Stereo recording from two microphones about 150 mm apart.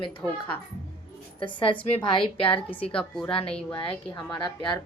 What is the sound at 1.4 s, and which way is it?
A woman's voice, 35° left (ahead or behind).